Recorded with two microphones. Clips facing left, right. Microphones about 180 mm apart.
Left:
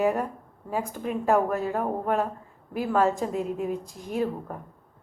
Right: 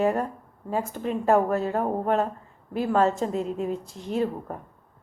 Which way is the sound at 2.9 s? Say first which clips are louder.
Right 1 dB; 10° left (ahead or behind).